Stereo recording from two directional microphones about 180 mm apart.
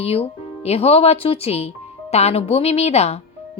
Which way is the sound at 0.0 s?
35° left (ahead or behind).